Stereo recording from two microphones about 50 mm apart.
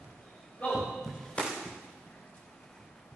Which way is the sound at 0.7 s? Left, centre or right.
Centre.